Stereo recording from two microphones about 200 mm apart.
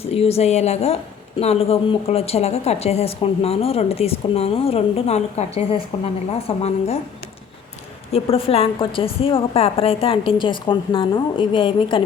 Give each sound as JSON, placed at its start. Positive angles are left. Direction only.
{"t": 0.1, "sound": "speech", "side_deg": 30}
{"t": 8.1, "sound": "a woman's voice", "side_deg": 30}